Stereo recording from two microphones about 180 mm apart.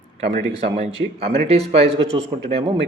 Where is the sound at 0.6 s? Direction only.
35° right (ahead or behind).